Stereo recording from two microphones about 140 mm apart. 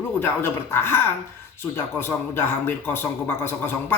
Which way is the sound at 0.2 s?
15° left (ahead or behind).